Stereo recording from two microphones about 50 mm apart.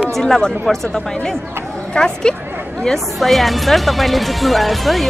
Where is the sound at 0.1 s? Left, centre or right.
Centre.